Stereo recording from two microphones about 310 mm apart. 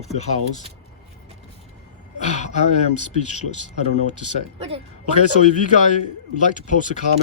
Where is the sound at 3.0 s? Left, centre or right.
Left.